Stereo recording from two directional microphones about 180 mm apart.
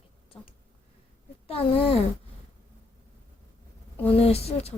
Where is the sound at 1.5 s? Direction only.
30° left (ahead or behind).